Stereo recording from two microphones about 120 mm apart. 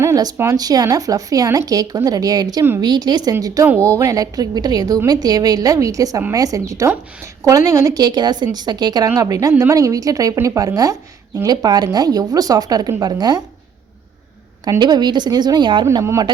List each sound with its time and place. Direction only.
0.0 s a woman's voice: 30° right (ahead or behind)
14.6 s speech: 35° right (ahead or behind)